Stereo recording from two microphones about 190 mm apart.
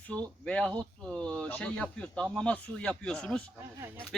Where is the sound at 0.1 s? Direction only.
5° left (ahead or behind).